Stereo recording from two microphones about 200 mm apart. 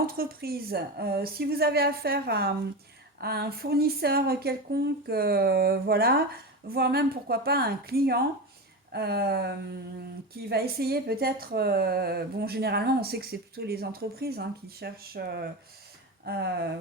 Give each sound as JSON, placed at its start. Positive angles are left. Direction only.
{"t": 0.2, "sound": "speech", "side_deg": -50}